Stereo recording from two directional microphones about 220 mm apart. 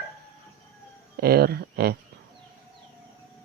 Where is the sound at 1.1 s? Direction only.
45° right (ahead or behind).